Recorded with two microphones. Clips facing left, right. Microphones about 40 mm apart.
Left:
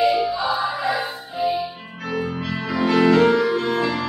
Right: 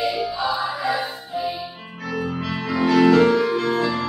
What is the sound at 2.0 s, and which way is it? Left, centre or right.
Music, centre.